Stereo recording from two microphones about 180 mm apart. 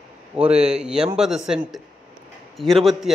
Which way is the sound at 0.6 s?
5° right (ahead or behind).